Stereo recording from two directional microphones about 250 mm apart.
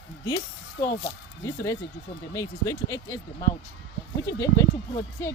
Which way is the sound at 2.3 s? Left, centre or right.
Centre.